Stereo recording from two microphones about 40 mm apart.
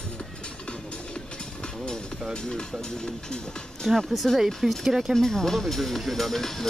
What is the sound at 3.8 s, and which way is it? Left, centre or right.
Speech, centre.